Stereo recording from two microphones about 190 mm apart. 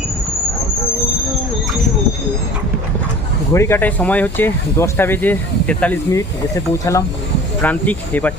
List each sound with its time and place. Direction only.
3.5 s speech: 15° left (ahead or behind)